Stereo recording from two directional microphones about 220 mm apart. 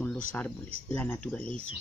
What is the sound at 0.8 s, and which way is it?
Speech, 10° left (ahead or behind).